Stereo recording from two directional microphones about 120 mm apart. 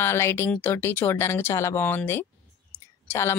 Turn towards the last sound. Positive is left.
turn(degrees=20)  # may be behind; listen again after turning